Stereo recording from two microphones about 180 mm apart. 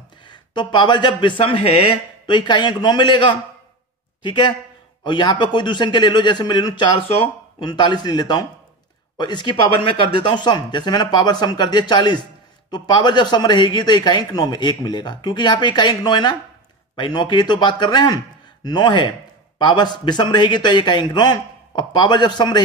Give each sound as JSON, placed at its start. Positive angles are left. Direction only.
{"t": 0.2, "sound": "a man's voice", "side_deg": 25}